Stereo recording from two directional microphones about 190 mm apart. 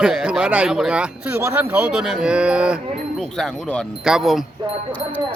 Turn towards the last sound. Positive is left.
turn(degrees=0)  # may be behind; listen again after turning